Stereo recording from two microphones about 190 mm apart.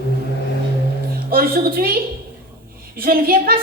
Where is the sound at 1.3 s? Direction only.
50° right (ahead or behind).